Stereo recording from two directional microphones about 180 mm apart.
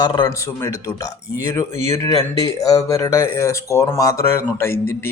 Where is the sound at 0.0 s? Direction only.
20° left (ahead or behind).